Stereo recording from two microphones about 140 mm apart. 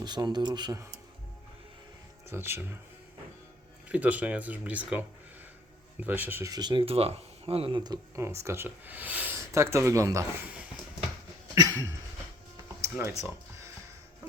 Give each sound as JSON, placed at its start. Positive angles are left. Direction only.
{"t": 0.0, "sound": "speech", "side_deg": -30}
{"t": 2.2, "sound": "speech", "side_deg": -15}
{"t": 3.8, "sound": "speech", "side_deg": -10}
{"t": 6.5, "sound": "speech", "side_deg": -30}
{"t": 7.9, "sound": "speech", "side_deg": -20}
{"t": 10.4, "sound": "a sound", "side_deg": -10}
{"t": 11.5, "sound": "a sound", "side_deg": -25}